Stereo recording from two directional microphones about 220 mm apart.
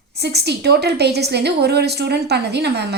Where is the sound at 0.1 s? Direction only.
50° right (ahead or behind).